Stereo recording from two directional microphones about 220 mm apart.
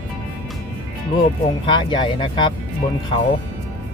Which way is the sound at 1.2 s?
20° left (ahead or behind).